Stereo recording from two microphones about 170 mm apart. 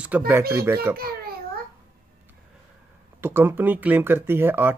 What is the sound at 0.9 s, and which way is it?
Speech, 60° right (ahead or behind).